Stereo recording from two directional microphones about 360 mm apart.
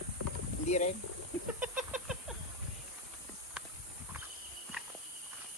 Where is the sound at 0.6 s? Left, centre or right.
Centre.